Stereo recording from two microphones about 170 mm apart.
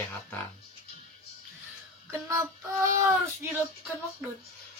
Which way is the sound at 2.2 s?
15° right (ahead or behind).